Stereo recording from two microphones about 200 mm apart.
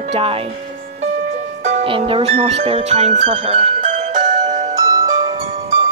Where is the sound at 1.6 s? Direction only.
30° right (ahead or behind).